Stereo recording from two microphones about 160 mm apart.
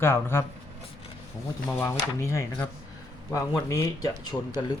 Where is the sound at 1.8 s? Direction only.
15° left (ahead or behind).